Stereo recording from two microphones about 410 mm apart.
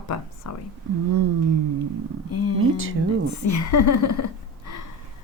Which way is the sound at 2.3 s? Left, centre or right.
Left.